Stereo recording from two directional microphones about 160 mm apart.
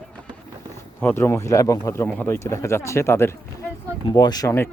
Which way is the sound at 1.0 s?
10° left (ahead or behind).